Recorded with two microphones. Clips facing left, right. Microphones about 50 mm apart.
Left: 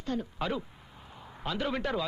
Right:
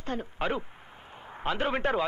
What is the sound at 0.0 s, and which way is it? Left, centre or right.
A man's voice, right.